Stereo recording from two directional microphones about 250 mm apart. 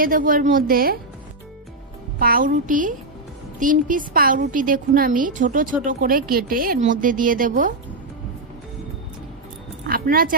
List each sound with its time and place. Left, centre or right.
0.0 s a woman's voice: right
2.1 s a woman's voice: right
9.8 s speech: right